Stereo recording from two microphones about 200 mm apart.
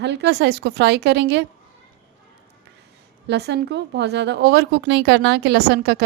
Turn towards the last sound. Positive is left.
turn(degrees=-55)  # may be behind; listen again after turning